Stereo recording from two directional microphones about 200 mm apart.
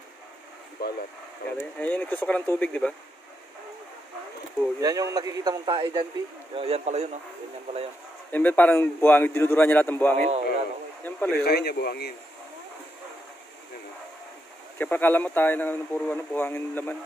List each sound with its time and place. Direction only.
0.8 s speech: 50° left (ahead or behind)
1.6 s speech: 10° left (ahead or behind)
4.7 s a man's voice: 15° right (ahead or behind); by 7.1 s 35° right (ahead or behind)
8.3 s speech: 10° left (ahead or behind)
10.1 s speech: 35° right (ahead or behind)
11.1 s speech: 10° left (ahead or behind)
11.3 s speech: 55° left (ahead or behind)
14.8 s speech: 10° left (ahead or behind)